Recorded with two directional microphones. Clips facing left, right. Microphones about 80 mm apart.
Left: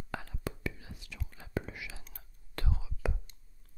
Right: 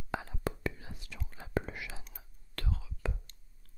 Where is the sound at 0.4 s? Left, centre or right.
Right.